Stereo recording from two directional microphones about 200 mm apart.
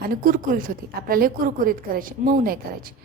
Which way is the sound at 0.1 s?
45° right (ahead or behind).